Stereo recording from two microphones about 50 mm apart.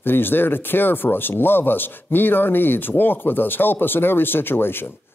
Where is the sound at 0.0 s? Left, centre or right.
Left.